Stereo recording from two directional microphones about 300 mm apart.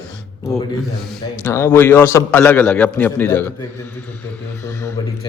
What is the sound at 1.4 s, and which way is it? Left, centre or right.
A man's voice, centre.